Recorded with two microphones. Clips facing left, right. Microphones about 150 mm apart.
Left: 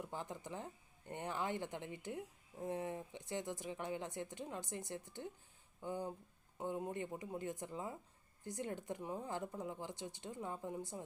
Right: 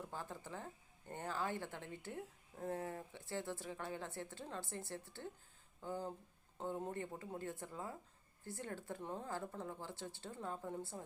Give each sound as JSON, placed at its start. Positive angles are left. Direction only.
{"t": 0.1, "sound": "speech", "side_deg": 15}